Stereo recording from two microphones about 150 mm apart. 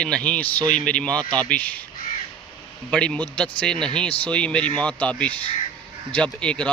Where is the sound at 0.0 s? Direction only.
5° left (ahead or behind).